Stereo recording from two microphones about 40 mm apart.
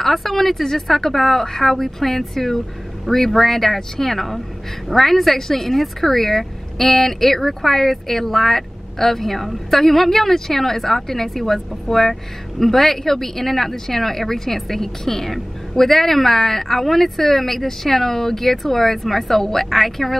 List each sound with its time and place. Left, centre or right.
0.0 s speech: centre